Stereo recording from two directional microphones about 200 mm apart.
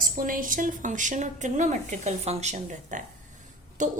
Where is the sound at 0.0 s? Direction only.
45° right (ahead or behind).